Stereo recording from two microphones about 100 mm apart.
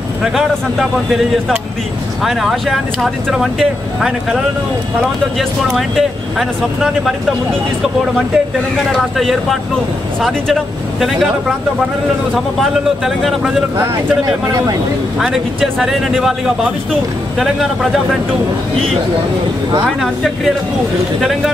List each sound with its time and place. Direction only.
0.2 s speech: 5° right (ahead or behind)
2.2 s speech: centre (ahead or behind)
5.7 s speech: centre (ahead or behind)
8.9 s speech: centre (ahead or behind)
12.5 s speech: centre (ahead or behind)
13.7 s speech: 35° right (ahead or behind)
15.1 s speech: 5° right (ahead or behind)
17.4 s speech: 5° right (ahead or behind)